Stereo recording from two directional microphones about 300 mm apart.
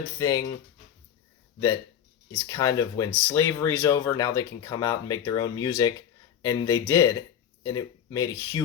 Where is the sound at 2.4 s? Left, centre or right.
Centre.